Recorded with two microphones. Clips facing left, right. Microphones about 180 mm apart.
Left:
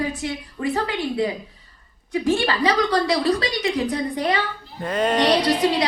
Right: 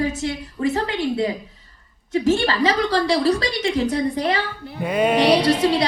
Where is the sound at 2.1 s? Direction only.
25° right (ahead or behind).